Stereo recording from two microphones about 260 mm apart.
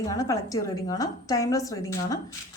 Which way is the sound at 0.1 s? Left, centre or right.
Centre.